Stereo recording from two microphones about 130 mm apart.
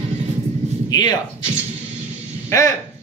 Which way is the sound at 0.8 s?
30° left (ahead or behind).